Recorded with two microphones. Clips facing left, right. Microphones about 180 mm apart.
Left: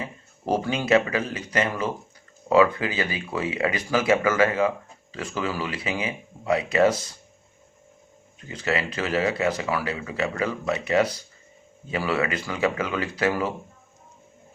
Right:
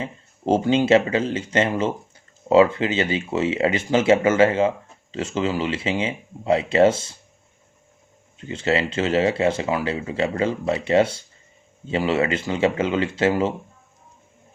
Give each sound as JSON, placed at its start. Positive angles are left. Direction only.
{"t": 0.0, "sound": "speech", "side_deg": -25}
{"t": 8.4, "sound": "speech", "side_deg": -25}